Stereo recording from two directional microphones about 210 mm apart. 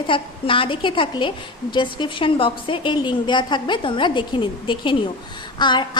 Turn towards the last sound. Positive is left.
turn(degrees=20)  # may be behind; listen again after turning